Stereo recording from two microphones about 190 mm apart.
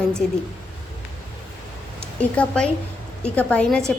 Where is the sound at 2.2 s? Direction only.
5° left (ahead or behind).